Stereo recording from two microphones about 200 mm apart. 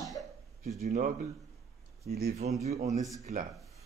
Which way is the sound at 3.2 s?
40° right (ahead or behind).